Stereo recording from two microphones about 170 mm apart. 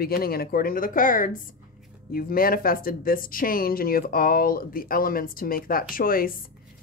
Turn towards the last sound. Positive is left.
turn(degrees=55)  # may be behind; listen again after turning